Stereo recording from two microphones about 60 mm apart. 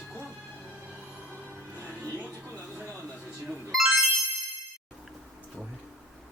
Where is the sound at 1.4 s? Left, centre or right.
Right.